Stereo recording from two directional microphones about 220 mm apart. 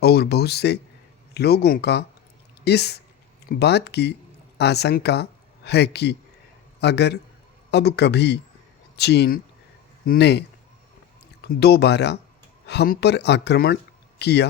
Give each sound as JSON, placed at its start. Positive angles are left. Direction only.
{"t": 0.0, "sound": "a man's voice", "side_deg": 45}
{"t": 11.4, "sound": "speech", "side_deg": 45}